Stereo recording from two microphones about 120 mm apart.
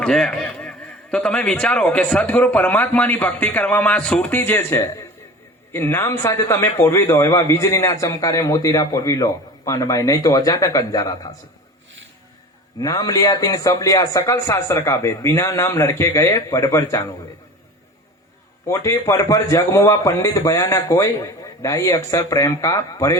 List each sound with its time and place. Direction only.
0.0 s a man's voice: 5° left (ahead or behind); by 11.3 s 30° left (ahead or behind)
12.8 s a man's voice: 30° left (ahead or behind)
18.7 s a man's voice: 25° left (ahead or behind)